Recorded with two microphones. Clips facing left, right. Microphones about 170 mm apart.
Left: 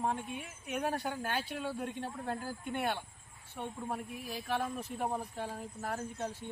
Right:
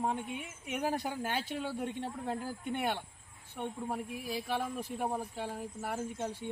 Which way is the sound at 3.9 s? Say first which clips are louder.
Right 2 dB; 10° right (ahead or behind).